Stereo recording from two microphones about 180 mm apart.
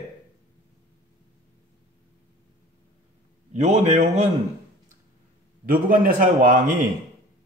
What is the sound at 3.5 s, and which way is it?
Speech, 40° right (ahead or behind).